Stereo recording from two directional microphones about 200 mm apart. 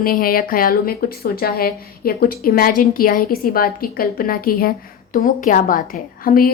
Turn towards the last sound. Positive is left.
turn(degrees=45)  # may be behind; listen again after turning